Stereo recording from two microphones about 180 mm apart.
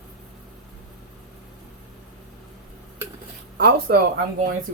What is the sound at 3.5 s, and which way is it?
Speech, 60° right (ahead or behind).